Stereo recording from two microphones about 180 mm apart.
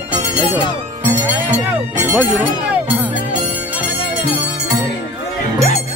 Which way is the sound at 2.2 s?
10° right (ahead or behind).